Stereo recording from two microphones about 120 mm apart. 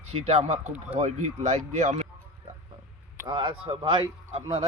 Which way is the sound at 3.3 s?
40° right (ahead or behind).